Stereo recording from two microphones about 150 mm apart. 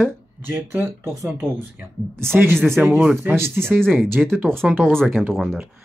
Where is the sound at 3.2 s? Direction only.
15° right (ahead or behind).